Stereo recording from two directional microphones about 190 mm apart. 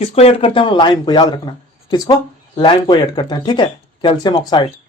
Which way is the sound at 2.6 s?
25° left (ahead or behind).